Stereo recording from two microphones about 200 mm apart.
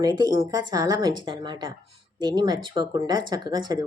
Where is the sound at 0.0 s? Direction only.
20° right (ahead or behind).